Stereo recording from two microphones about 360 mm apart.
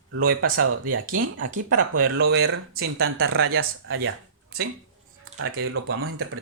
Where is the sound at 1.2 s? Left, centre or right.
Right.